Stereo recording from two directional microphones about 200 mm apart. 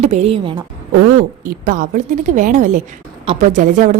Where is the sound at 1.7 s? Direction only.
40° right (ahead or behind).